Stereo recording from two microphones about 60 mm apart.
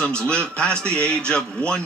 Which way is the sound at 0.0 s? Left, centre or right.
Centre.